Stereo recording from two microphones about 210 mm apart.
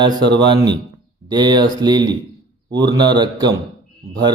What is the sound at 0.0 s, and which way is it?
A man's voice, 20° right (ahead or behind).